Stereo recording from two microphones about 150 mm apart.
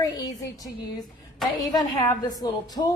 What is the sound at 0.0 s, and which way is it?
Music, 25° left (ahead or behind).